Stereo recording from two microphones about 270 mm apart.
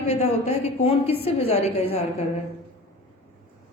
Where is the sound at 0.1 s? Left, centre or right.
Left.